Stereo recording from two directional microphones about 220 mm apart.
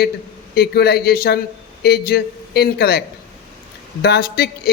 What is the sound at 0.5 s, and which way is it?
Speech, 45° left (ahead or behind).